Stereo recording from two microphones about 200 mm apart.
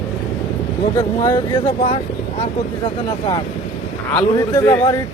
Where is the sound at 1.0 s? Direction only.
20° left (ahead or behind).